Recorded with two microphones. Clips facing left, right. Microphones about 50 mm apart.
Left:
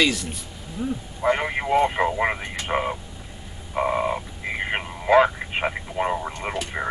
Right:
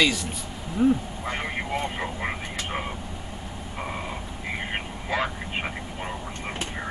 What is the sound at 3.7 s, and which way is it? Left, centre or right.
Frog, left.